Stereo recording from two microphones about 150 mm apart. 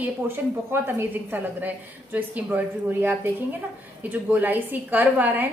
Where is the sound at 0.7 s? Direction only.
15° right (ahead or behind).